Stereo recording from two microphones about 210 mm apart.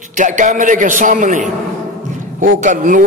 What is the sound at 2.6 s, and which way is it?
Speech, 35° right (ahead or behind).